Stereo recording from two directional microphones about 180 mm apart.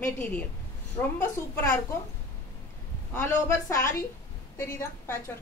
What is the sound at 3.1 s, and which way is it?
Speech, 15° left (ahead or behind).